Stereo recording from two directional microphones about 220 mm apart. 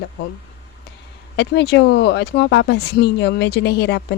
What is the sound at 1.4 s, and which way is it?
Speech, 50° left (ahead or behind).